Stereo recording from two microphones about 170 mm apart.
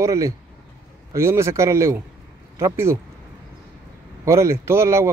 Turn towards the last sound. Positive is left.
turn(degrees=-15)  # may be behind; listen again after turning